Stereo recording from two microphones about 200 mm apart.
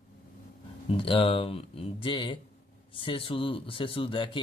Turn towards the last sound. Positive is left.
turn(degrees=25)  # may be behind; listen again after turning